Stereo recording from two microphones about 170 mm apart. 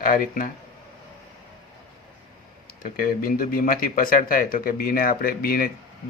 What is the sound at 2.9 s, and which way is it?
Speech, 55° left (ahead or behind).